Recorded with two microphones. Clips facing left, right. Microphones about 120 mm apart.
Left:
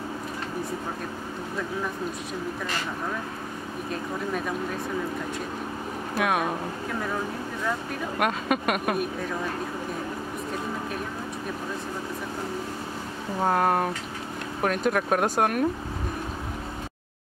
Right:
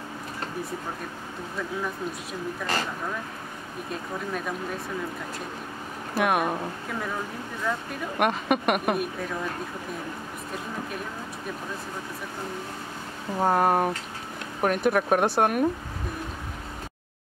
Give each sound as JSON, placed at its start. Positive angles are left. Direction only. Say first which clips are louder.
{"t": 6.1, "sound": "speech", "louder": "right 2 dB", "side_deg": -5}
{"t": 8.2, "sound": "speech", "louder": "right 2 dB", "side_deg": -5}
{"t": 13.4, "sound": "speech", "louder": "right 1 dB", "side_deg": -5}